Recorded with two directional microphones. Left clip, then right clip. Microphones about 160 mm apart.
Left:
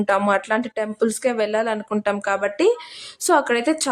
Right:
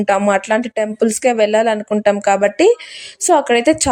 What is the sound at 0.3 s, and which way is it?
A woman's voice, 25° right (ahead or behind).